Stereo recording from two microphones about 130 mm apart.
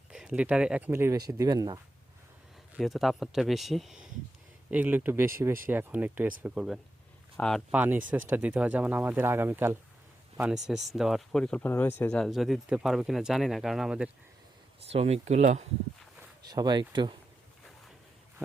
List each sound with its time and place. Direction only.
0.1 s speech: 5° right (ahead or behind); by 1.8 s 30° right (ahead or behind)
2.7 s speech: centre (ahead or behind)
4.7 s speech: 15° right (ahead or behind)
7.3 s speech: 5° left (ahead or behind)
7.7 s speech: 15° right (ahead or behind)
10.3 s speech: 5° right (ahead or behind)
14.8 s speech: 50° right (ahead or behind)
16.5 s speech: 30° right (ahead or behind)